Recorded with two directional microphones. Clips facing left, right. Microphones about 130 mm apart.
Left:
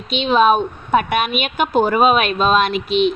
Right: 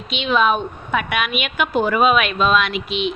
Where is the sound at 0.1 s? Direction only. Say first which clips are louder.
Left 4 dB; 35° left (ahead or behind).